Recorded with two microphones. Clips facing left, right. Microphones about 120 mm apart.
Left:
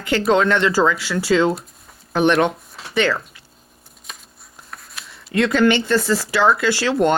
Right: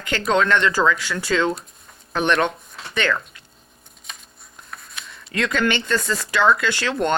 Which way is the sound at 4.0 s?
Centre (ahead or behind).